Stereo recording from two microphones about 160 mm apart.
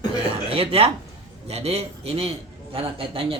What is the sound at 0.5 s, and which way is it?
Speech, 35° right (ahead or behind).